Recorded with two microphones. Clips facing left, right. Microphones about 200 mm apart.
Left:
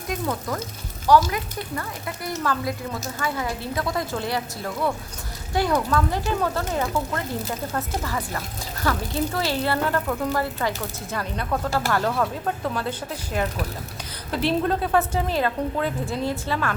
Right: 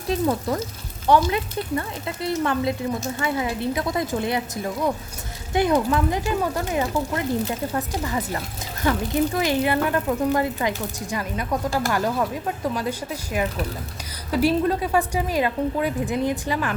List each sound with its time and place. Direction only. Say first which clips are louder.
0.1 s a woman's voice: right 5 dB; 30° right (ahead or behind)